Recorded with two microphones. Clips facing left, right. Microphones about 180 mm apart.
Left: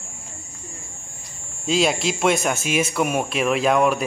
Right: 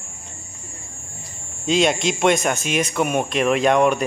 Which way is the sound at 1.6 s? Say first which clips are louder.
Right 2 dB; centre (ahead or behind).